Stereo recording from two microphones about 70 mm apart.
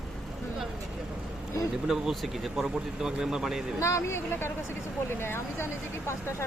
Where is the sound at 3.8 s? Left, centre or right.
Left.